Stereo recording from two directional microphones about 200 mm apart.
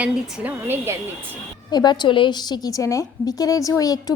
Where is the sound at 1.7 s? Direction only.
20° left (ahead or behind).